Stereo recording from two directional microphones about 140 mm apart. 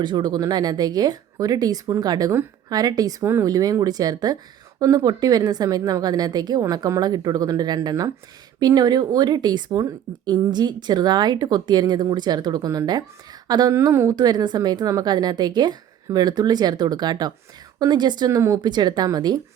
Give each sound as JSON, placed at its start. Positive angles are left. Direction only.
{"t": 0.0, "sound": "a woman's voice", "side_deg": -30}